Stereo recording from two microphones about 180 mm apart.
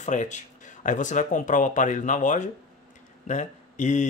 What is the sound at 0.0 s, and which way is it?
Speech, 40° left (ahead or behind).